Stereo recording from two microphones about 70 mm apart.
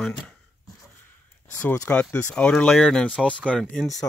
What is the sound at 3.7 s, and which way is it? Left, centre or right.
Speech, centre.